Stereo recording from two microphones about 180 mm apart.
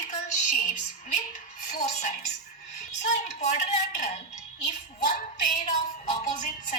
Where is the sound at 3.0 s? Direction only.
40° left (ahead or behind).